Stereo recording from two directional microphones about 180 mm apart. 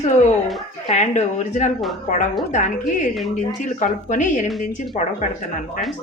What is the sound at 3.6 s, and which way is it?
A woman's voice, 45° left (ahead or behind).